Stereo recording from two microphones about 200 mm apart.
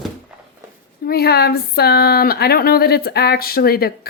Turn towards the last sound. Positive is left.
turn(degrees=50)  # may be behind; listen again after turning